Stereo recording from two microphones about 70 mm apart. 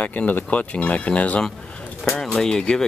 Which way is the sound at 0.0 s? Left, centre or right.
Left.